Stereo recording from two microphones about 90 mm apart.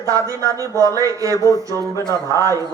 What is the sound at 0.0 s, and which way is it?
Speech, 35° right (ahead or behind).